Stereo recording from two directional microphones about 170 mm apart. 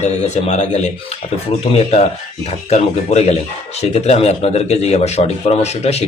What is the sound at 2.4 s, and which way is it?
A man's voice, 40° left (ahead or behind).